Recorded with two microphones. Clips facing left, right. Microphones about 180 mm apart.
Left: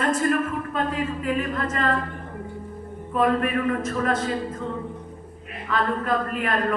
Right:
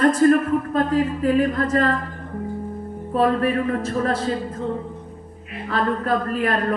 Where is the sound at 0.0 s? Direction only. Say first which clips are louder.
Right 7 dB; 35° right (ahead or behind).